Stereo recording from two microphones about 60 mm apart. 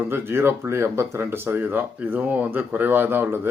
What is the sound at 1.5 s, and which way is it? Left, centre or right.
Speech, right.